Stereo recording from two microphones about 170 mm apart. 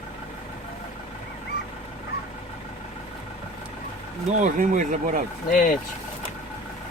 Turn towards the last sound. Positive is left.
turn(degrees=50)  # may be behind; listen again after turning